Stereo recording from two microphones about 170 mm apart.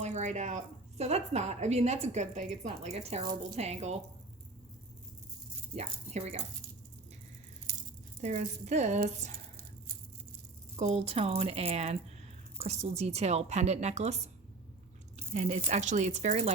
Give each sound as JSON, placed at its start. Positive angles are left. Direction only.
{"t": 0.0, "sound": "a woman's voice", "side_deg": -45}
{"t": 5.7, "sound": "a woman's voice", "side_deg": -40}
{"t": 8.2, "sound": "speech", "side_deg": -45}
{"t": 10.8, "sound": "a woman's voice", "side_deg": -40}